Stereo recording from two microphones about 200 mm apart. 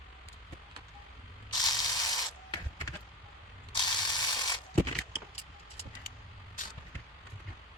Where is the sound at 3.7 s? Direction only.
20° left (ahead or behind).